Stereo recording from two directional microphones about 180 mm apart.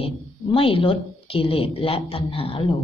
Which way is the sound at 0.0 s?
30° left (ahead or behind).